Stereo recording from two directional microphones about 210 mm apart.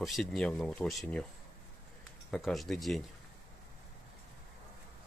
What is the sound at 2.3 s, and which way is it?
Speech, centre (ahead or behind).